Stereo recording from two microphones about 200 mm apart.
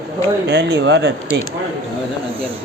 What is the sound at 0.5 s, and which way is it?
Speech, 60° right (ahead or behind).